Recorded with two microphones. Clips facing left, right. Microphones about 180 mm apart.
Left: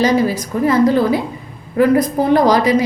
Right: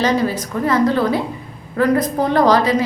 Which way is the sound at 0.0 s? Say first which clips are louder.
Left 3 dB; 10° left (ahead or behind).